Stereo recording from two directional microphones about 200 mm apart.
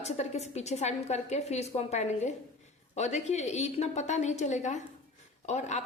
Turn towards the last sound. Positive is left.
turn(degrees=35)  # may be behind; listen again after turning